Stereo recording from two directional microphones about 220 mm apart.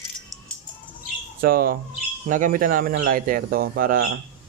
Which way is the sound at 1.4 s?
40° right (ahead or behind).